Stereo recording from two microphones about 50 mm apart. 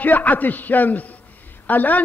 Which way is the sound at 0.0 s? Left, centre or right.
Left.